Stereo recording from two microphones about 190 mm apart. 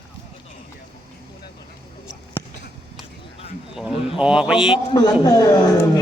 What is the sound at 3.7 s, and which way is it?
Speech, 5° right (ahead or behind).